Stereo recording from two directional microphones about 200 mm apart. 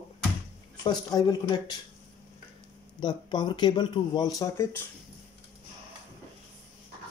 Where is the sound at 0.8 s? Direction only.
20° left (ahead or behind).